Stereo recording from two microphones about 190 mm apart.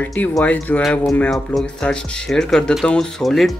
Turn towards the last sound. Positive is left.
turn(degrees=0)  # may be behind; listen again after turning